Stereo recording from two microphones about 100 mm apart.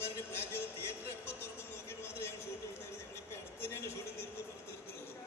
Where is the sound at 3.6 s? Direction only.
25° left (ahead or behind).